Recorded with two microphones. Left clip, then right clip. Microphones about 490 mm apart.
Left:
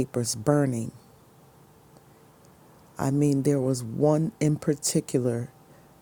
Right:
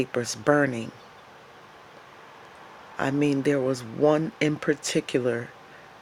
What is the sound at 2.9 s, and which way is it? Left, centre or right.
Speech, left.